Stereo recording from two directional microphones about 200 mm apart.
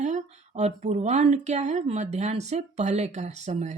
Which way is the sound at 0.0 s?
35° right (ahead or behind).